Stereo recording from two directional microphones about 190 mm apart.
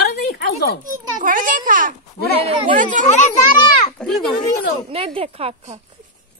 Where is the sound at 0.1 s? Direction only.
60° left (ahead or behind).